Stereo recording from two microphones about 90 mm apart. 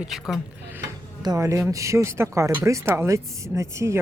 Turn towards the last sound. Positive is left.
turn(degrees=-30)  # may be behind; listen again after turning